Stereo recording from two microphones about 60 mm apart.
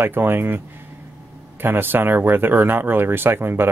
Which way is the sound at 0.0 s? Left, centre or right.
Right.